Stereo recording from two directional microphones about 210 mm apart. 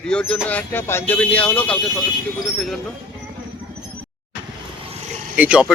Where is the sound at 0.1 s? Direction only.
5° left (ahead or behind).